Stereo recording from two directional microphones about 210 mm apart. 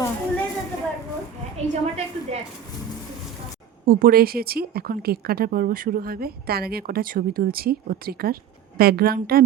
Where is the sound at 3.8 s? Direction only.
45° right (ahead or behind).